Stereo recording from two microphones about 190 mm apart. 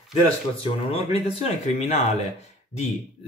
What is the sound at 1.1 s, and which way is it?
Speech, 30° left (ahead or behind).